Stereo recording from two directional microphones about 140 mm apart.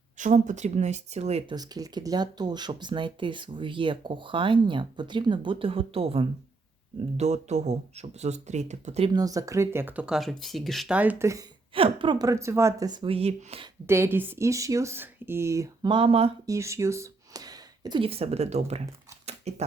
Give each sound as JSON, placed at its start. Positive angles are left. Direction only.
{"t": 0.2, "sound": "speech", "side_deg": -60}
{"t": 1.5, "sound": "speech", "side_deg": -30}
{"t": 7.2, "sound": "speech", "side_deg": -55}
{"t": 9.1, "sound": "speech", "side_deg": -25}
{"t": 11.7, "sound": "a woman's voice", "side_deg": -40}
{"t": 12.2, "sound": "speech", "side_deg": -20}
{"t": 13.1, "sound": "speech", "side_deg": -45}
{"t": 13.8, "sound": "speech", "side_deg": -15}
{"t": 15.9, "sound": "speech", "side_deg": -40}
{"t": 16.5, "sound": "speech", "side_deg": -20}
{"t": 19.2, "sound": "a sound", "side_deg": -50}